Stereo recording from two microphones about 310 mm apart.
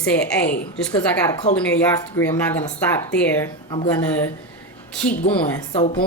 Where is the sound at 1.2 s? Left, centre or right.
Centre.